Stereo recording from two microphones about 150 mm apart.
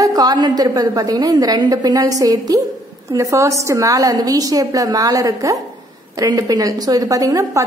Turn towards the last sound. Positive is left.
turn(degrees=-20)  # may be behind; listen again after turning